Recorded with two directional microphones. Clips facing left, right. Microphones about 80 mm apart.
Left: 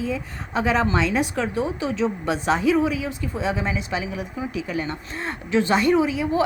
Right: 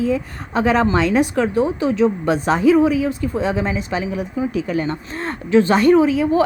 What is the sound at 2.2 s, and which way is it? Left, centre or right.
Speech, right.